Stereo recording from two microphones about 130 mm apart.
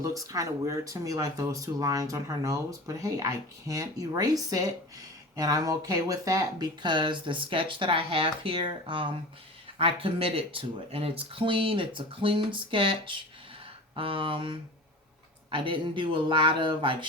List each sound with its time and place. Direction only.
0.0 s speech: 25° right (ahead or behind)